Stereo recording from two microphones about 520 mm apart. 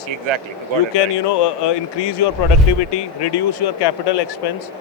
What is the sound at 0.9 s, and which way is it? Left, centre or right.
Speech, left.